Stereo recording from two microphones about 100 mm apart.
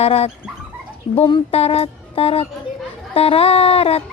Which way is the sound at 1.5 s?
90° left.